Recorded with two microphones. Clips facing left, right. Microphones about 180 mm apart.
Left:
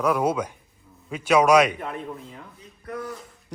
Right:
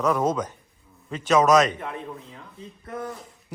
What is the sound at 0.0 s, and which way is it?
A man's voice, 10° left (ahead or behind).